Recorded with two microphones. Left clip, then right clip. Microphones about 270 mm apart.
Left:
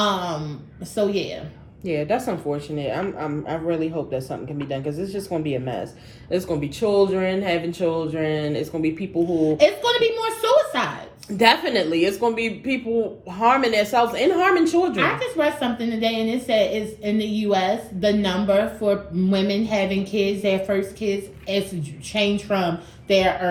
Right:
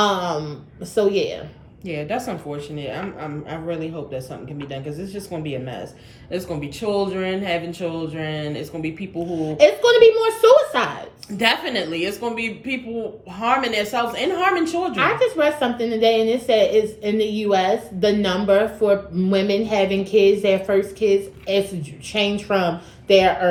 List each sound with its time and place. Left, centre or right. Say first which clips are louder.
0.0 s a woman's voice: right 3 dB; centre
1.8 s speech: left 3 dB; centre
9.6 s a woman's voice: right 7 dB; centre
11.3 s speech: left 3 dB; centre
14.9 s a woman's voice: right 3 dB; centre